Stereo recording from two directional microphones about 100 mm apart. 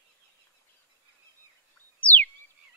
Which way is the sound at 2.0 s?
15° left (ahead or behind).